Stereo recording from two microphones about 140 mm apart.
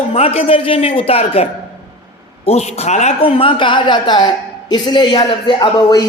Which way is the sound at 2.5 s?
50° left (ahead or behind).